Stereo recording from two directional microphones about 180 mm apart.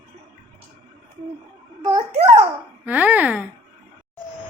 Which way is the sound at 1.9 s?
35° right (ahead or behind).